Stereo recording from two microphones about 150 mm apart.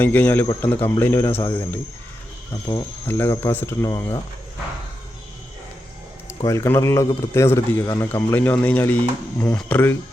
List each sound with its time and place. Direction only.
0.0 s a man's voice: 10° left (ahead or behind)
3.1 s a man's voice: 15° left (ahead or behind)
6.4 s a man's voice: 20° left (ahead or behind)